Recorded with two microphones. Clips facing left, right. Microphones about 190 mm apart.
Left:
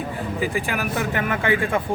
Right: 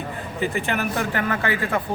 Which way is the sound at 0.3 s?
5° left (ahead or behind).